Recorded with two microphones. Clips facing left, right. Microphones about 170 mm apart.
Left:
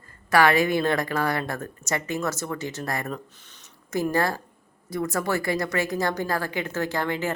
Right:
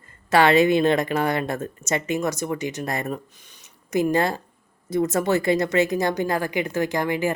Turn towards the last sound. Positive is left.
turn(degrees=-15)  # may be behind; listen again after turning